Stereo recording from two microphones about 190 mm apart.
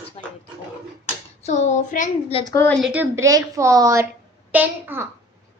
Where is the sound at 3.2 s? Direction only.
15° right (ahead or behind).